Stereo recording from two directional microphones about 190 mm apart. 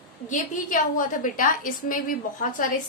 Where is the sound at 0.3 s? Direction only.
45° left (ahead or behind).